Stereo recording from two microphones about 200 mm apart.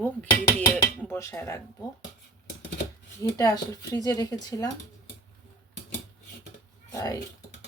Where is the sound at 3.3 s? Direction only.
15° left (ahead or behind).